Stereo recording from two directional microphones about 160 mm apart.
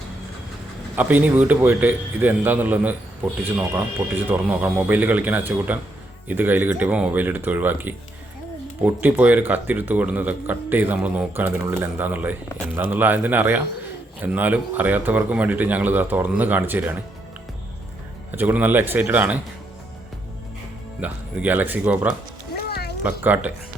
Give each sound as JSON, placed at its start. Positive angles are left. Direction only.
{"t": 0.9, "sound": "speech", "side_deg": -10}
{"t": 18.3, "sound": "speech", "side_deg": -10}
{"t": 21.0, "sound": "speech", "side_deg": -10}
{"t": 22.5, "sound": "music", "side_deg": 80}
{"t": 23.0, "sound": "speech", "side_deg": -10}